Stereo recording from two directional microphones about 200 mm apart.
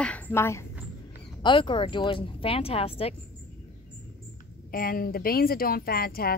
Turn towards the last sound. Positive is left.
turn(degrees=50)  # may be behind; listen again after turning